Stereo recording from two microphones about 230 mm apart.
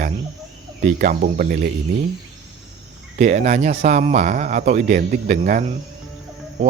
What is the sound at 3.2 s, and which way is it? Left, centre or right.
Speech, right.